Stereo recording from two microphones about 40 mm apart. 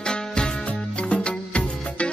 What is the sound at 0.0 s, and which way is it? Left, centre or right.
Music, left.